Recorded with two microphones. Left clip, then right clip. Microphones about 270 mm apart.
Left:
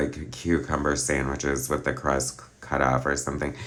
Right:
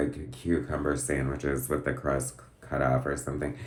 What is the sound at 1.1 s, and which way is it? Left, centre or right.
Speech, centre.